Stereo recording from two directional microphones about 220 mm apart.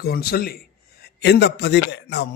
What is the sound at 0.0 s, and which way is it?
A man's voice, 45° left (ahead or behind).